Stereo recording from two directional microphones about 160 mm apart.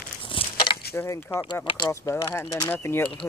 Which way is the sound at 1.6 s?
25° left (ahead or behind).